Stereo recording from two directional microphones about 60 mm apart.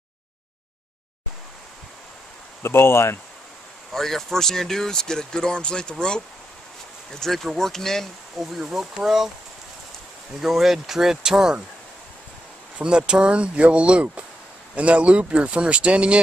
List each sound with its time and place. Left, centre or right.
2.6 s speech: left
3.9 s speech: centre
8.5 s speech: centre
10.4 s speech: centre
12.7 s speech: centre